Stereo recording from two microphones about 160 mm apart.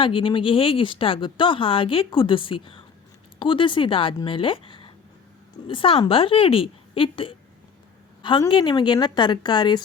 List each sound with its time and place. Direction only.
0.0 s a woman's voice: 30° left (ahead or behind)